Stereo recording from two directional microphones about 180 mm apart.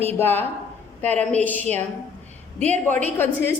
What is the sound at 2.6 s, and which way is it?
Speech, 40° right (ahead or behind).